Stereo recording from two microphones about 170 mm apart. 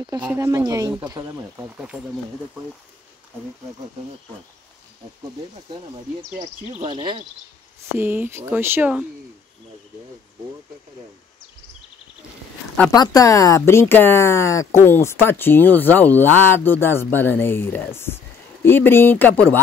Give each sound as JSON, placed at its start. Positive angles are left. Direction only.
{"t": 0.0, "sound": "speech", "side_deg": -25}
{"t": 1.6, "sound": "speech", "side_deg": -5}
{"t": 6.8, "sound": "speech", "side_deg": -30}
{"t": 8.0, "sound": "speech", "side_deg": -10}
{"t": 12.9, "sound": "speech", "side_deg": 20}